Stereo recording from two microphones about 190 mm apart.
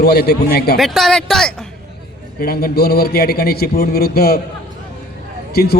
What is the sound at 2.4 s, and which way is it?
Speech, 55° left (ahead or behind).